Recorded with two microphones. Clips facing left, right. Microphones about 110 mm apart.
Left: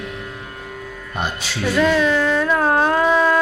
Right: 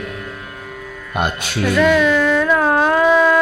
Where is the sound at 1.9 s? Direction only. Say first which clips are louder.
Right 3 dB; 25° left (ahead or behind).